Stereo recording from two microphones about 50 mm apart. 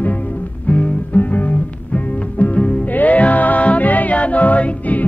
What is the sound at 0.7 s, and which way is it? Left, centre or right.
Music, left.